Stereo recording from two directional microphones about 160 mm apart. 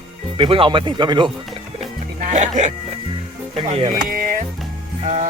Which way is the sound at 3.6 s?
30° right (ahead or behind).